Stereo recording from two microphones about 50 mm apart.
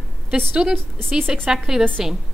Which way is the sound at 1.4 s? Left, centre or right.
Centre.